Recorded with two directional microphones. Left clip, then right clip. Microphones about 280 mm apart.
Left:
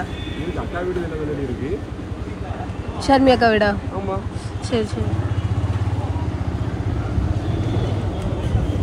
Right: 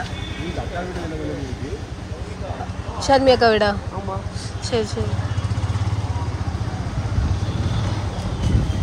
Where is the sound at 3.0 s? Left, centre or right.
Centre.